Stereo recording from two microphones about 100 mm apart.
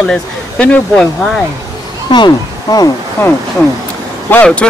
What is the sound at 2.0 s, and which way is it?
Speech, 50° left (ahead or behind).